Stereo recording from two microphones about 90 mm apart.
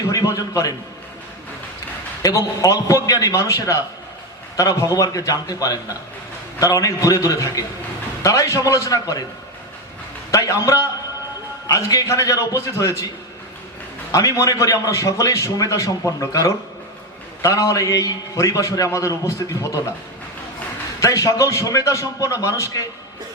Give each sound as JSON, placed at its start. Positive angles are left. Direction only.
{"t": 0.1, "sound": "a man's voice", "side_deg": 40}
{"t": 2.2, "sound": "a man's voice", "side_deg": 35}
{"t": 10.3, "sound": "a man's voice", "side_deg": 35}
{"t": 14.1, "sound": "a man's voice", "side_deg": 35}
{"t": 21.0, "sound": "a man's voice", "side_deg": 35}